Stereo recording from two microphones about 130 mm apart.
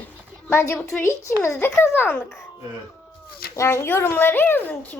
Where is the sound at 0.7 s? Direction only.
10° left (ahead or behind).